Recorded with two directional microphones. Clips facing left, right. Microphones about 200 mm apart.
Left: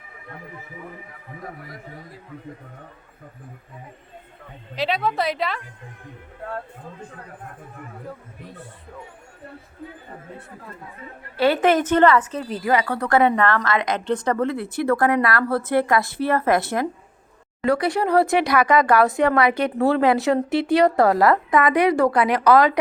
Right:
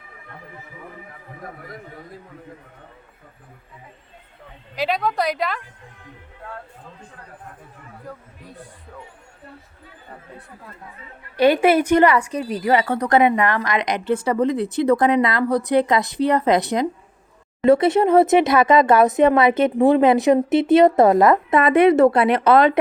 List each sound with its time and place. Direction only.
4.7 s a woman's voice: centre (ahead or behind)
11.3 s a woman's voice: 15° right (ahead or behind)